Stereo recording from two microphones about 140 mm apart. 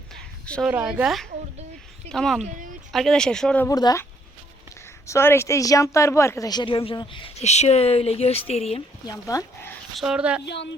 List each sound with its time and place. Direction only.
0.1 s a sound: 5° left (ahead or behind)
0.7 s speech: 10° right (ahead or behind)
2.4 s speech: 70° right (ahead or behind)
2.9 s speech: 5° left (ahead or behind)
3.7 s speech: 25° left (ahead or behind)
5.0 s a woman's voice: 20° left (ahead or behind); by 8.8 s 45° left (ahead or behind)
9.1 s speech: 25° left (ahead or behind)
9.9 s speech: 5° right (ahead or behind)